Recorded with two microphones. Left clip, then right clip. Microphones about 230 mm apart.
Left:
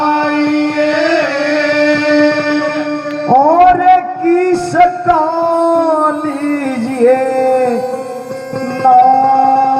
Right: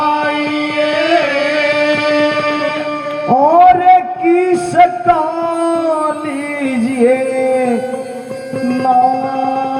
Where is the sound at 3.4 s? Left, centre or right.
Left.